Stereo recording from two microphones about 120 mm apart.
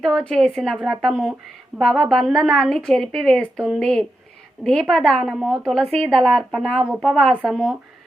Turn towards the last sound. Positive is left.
turn(degrees=0)  # may be behind; listen again after turning